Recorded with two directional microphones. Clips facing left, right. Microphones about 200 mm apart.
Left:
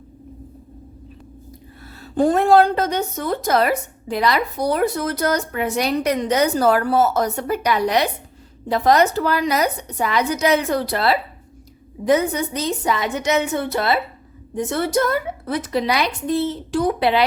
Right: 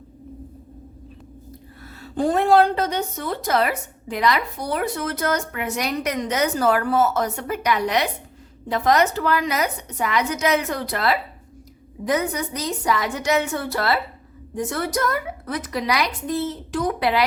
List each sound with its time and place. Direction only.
2.0 s a woman's voice: 45° left (ahead or behind); by 17.2 s 25° left (ahead or behind)